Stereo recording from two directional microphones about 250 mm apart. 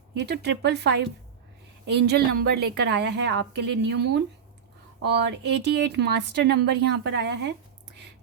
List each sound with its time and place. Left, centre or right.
0.1 s a woman's voice: right